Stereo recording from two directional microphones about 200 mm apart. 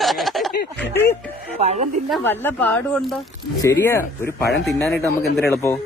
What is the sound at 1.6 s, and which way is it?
Speech, 35° right (ahead or behind).